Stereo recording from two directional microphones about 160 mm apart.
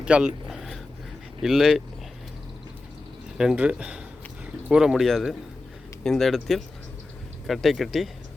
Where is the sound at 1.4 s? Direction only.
5° right (ahead or behind).